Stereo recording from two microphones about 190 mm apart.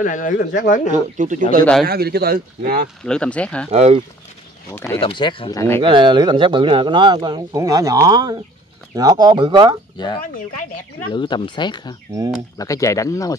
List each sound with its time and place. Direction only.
0.0 s speech: 45° left (ahead or behind)
0.9 s speech: 40° right (ahead or behind)
1.9 s speech: 55° right (ahead or behind)
3.1 s speech: 5° left (ahead or behind)
3.7 s speech: 35° right (ahead or behind)
4.6 s speech: 15° left (ahead or behind)
5.0 s speech: 25° left (ahead or behind)
5.8 s speech: 25° right (ahead or behind)
9.9 s speech: 25° left (ahead or behind)
10.2 s speech: 45° left (ahead or behind)
11.1 s speech: 25° left (ahead or behind)